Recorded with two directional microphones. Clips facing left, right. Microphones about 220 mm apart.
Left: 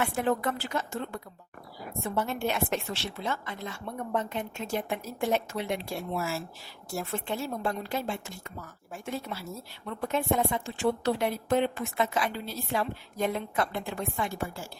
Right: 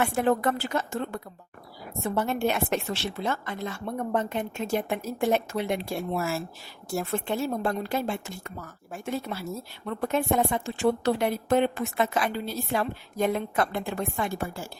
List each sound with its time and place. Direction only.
0.0 s a woman's voice: 50° right (ahead or behind)